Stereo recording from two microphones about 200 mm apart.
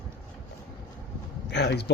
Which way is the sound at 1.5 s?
60° left (ahead or behind).